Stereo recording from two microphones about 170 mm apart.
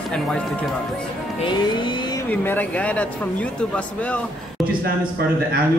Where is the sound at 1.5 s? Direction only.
25° left (ahead or behind).